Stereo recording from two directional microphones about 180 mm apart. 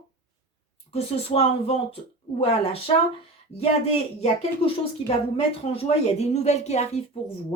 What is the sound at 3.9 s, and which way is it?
Speech, 35° left (ahead or behind).